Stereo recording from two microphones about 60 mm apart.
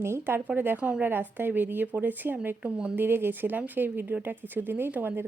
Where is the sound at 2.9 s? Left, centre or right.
Right.